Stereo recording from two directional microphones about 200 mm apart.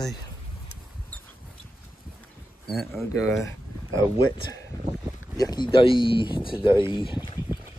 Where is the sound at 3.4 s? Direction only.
15° left (ahead or behind).